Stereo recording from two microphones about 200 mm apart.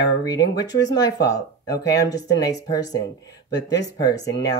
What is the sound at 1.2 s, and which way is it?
Speech, 55° left (ahead or behind).